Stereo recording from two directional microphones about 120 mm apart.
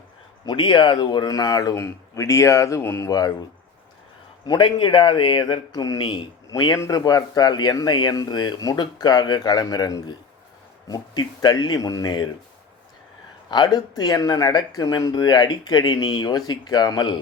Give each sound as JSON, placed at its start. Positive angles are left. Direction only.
{"t": 0.4, "sound": "a man's voice", "side_deg": 40}
{"t": 3.1, "sound": "speech", "side_deg": 30}
{"t": 4.4, "sound": "speech", "side_deg": 40}
{"t": 13.5, "sound": "speech", "side_deg": 35}